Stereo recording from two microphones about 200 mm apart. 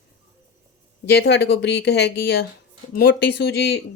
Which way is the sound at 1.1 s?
55° left (ahead or behind).